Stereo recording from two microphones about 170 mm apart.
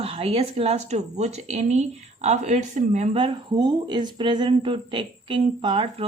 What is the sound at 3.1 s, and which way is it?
A woman's voice, 30° right (ahead or behind).